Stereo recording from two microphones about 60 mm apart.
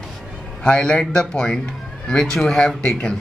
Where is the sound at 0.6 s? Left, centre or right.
Centre.